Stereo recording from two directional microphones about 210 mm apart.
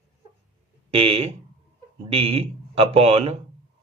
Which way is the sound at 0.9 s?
25° right (ahead or behind).